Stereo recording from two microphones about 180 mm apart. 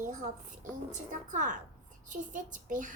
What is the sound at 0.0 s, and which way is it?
A child's voice, 45° right (ahead or behind).